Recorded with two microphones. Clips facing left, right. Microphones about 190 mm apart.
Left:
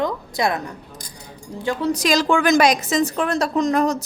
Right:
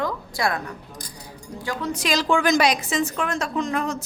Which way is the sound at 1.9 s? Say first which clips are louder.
Left 2 dB; 40° left (ahead or behind).